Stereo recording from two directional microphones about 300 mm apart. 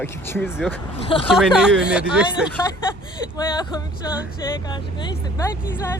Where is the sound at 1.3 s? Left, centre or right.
Centre.